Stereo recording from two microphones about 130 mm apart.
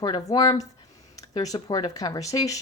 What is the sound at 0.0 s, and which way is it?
Speech, 30° left (ahead or behind).